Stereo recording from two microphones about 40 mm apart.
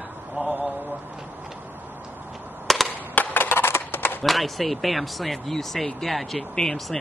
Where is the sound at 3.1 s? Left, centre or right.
Left.